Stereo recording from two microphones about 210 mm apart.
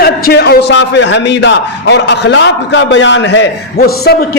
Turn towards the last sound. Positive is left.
turn(degrees=45)  # may be behind; listen again after turning